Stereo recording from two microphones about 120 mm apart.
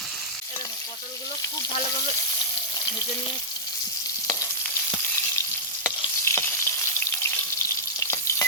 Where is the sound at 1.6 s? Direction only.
35° left (ahead or behind).